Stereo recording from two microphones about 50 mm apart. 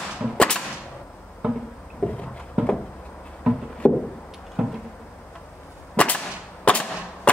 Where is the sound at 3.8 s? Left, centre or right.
Left.